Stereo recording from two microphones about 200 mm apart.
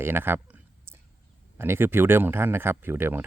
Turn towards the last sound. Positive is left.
turn(degrees=-10)  # may be behind; listen again after turning